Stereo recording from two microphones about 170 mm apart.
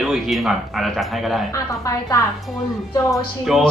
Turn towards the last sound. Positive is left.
turn(degrees=0)  # may be behind; listen again after turning